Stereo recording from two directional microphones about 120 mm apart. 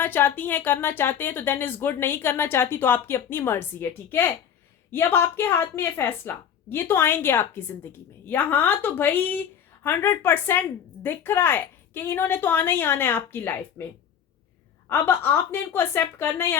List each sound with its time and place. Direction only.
0.0 s a woman's voice: 20° left (ahead or behind)
14.8 s speech: 20° left (ahead or behind)